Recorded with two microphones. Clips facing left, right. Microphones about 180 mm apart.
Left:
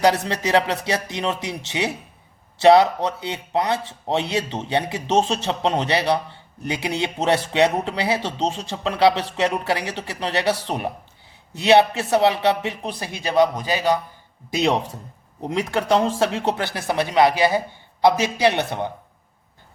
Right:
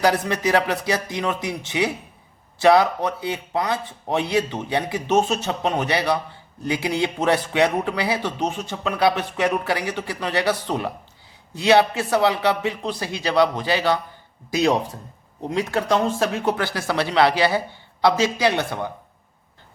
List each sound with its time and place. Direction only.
0.0 s speech: 25° left (ahead or behind)
2.6 s a man's voice: 25° left (ahead or behind)
14.5 s speech: 25° left (ahead or behind)